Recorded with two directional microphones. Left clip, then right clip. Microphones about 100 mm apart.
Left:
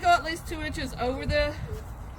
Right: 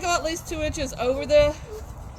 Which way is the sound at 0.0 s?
65° left (ahead or behind).